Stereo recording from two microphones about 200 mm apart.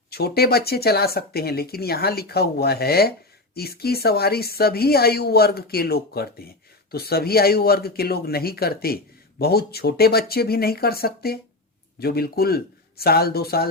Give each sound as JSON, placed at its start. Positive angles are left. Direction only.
{"t": 0.1, "sound": "speech", "side_deg": 50}